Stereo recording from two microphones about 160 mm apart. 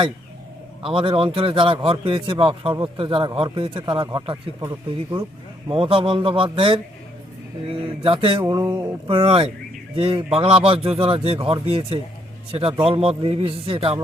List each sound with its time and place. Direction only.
0.8 s a man's voice: 35° right (ahead or behind)
9.0 s a man's voice: 35° right (ahead or behind)